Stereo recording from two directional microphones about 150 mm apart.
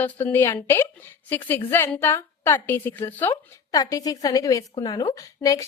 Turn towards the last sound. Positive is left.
turn(degrees=20)  # may be behind; listen again after turning